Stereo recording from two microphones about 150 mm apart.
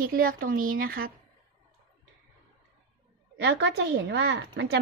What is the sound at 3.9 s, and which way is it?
Speech, 90° right.